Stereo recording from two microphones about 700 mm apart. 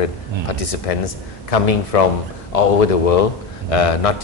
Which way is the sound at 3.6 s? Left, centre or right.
Left.